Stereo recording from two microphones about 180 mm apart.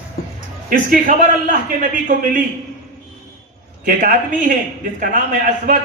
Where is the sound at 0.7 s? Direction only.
50° right (ahead or behind).